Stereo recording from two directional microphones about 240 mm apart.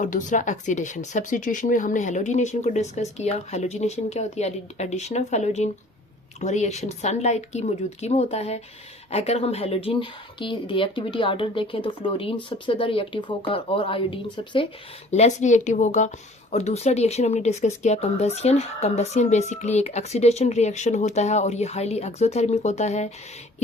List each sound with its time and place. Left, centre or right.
0.0 s speech: left